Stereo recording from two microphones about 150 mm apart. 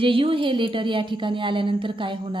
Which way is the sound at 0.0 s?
35° right (ahead or behind).